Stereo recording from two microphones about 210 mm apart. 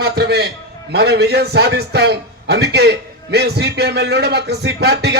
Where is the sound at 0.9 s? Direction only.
50° right (ahead or behind).